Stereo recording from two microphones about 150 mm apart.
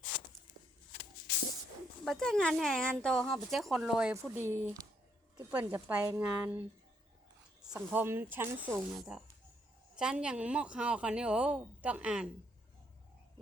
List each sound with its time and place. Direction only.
2.0 s a woman's voice: 5° left (ahead or behind)
4.1 s speech: 15° right (ahead or behind)
7.7 s a woman's voice: 10° right (ahead or behind)